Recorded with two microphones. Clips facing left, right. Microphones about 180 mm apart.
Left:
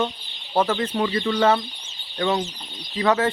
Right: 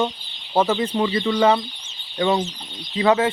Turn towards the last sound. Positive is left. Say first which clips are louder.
# right 3 dB
turn(degrees=-20)  # may be behind; listen again after turning